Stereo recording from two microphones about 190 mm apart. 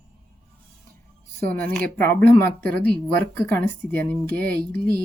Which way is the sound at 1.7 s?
10° left (ahead or behind).